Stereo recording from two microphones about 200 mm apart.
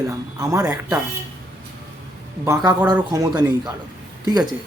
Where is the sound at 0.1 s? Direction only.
15° right (ahead or behind).